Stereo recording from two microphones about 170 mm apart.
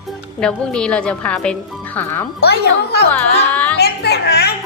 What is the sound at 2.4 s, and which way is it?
Speech, 75° left (ahead or behind).